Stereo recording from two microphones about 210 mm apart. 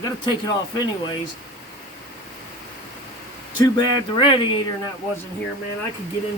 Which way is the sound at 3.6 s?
20° left (ahead or behind).